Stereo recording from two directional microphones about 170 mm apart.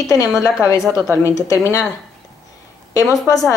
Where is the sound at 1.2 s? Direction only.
20° left (ahead or behind).